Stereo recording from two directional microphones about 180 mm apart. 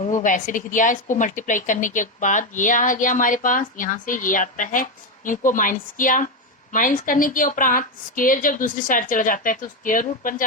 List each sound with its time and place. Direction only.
0.0 s a woman's voice: 45° left (ahead or behind)